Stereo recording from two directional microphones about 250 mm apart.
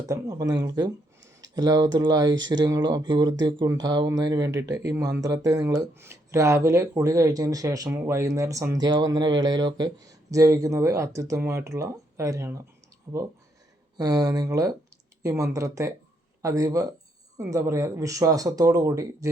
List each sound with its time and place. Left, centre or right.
0.1 s speech: centre